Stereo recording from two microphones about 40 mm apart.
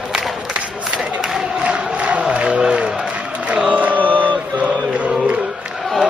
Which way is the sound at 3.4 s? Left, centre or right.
Right.